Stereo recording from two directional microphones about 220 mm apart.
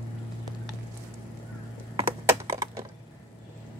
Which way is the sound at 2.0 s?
15° right (ahead or behind).